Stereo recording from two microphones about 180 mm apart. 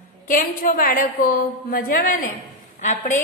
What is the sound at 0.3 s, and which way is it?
A woman's voice, 50° left (ahead or behind).